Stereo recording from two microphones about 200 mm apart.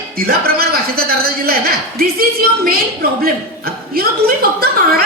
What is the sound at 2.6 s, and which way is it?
A woman's voice, 50° right (ahead or behind).